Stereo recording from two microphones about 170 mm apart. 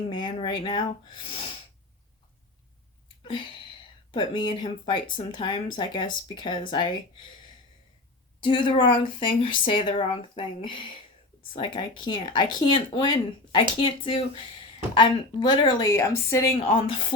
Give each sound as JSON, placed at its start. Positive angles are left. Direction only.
{"t": 0.1, "sound": "speech", "side_deg": 30}
{"t": 3.2, "sound": "speech", "side_deg": 30}
{"t": 8.4, "sound": "speech", "side_deg": 30}
{"t": 16.6, "sound": "speech", "side_deg": 35}